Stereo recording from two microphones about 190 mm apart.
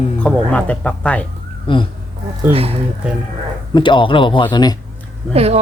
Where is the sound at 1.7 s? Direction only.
25° left (ahead or behind).